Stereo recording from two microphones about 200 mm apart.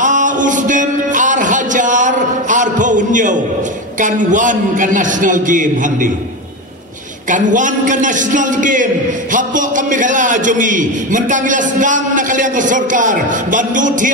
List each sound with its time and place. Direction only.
0.0 s music: 40° right (ahead or behind)
4.0 s a man's voice: 40° right (ahead or behind)
7.2 s a man's voice: 40° right (ahead or behind)